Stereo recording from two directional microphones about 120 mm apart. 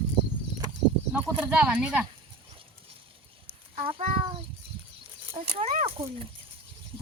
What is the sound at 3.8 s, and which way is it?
Speech, 50° right (ahead or behind).